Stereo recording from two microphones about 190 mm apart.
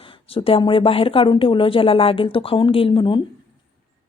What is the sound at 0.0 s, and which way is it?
Speech, 30° left (ahead or behind).